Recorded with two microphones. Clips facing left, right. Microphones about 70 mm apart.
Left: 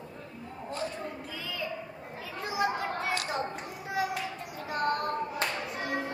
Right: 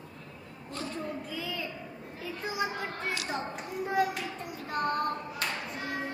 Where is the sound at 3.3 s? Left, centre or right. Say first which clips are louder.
Left 1 dB; centre.